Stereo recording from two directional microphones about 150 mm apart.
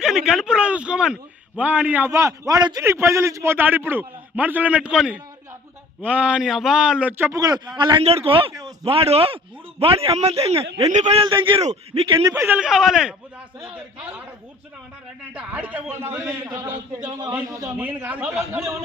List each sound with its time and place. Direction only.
0.0 s a man's voice: 5° right (ahead or behind); by 8.0 s 30° right (ahead or behind)
8.0 s a man's voice: 40° right (ahead or behind)
11.6 s a man's voice: 45° right (ahead or behind)
12.2 s a man's voice: 15° right (ahead or behind)
15.3 s a man's voice: 10° right (ahead or behind)